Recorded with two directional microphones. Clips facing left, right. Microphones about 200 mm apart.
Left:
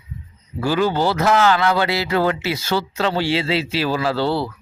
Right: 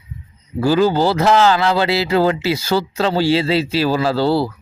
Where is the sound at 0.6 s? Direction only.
35° right (ahead or behind).